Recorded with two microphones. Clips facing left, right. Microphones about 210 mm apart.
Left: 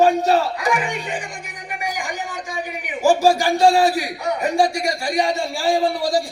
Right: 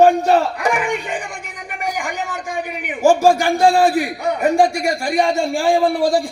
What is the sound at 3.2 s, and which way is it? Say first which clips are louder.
A man's voice: right 2 dB; 55° right (ahead or behind).